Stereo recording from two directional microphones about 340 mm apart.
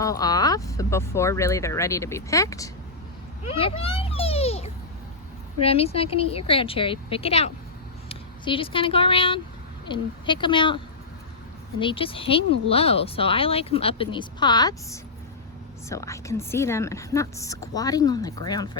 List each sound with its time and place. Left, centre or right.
0.0 s speech: centre
3.5 s children playing: centre
5.5 s speech: centre
11.8 s speech: centre